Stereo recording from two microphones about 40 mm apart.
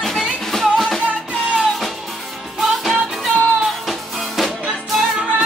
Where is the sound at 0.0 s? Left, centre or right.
Centre.